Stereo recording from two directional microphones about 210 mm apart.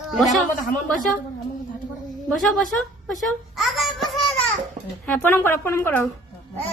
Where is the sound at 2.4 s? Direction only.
Centre (ahead or behind).